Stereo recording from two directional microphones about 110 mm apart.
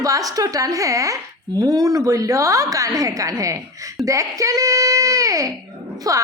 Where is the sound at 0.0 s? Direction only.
30° right (ahead or behind).